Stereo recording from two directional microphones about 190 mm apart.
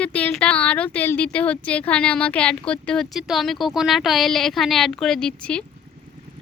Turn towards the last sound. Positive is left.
turn(degrees=5)  # may be behind; listen again after turning